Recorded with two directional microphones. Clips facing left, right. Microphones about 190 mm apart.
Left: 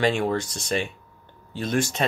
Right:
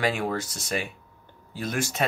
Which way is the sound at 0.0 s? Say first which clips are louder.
Left 4 dB; 5° right (ahead or behind).